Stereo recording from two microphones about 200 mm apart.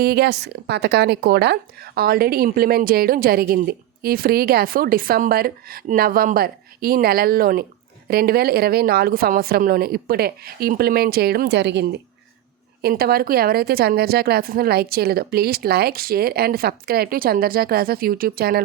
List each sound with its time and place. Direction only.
0.0 s speech: 55° right (ahead or behind)